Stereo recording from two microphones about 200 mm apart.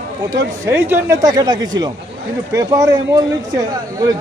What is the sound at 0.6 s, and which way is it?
A man's voice, 10° right (ahead or behind).